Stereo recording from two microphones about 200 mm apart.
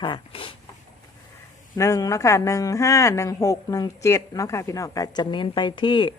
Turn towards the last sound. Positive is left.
turn(degrees=25)  # may be behind; listen again after turning